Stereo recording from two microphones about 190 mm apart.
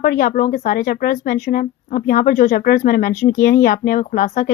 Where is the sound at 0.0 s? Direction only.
50° left (ahead or behind).